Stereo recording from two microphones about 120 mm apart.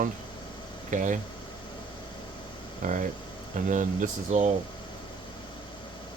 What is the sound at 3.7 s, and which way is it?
Speech, 90° right.